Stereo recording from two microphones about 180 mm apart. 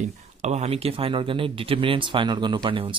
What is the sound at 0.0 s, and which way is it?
Speech, 40° right (ahead or behind).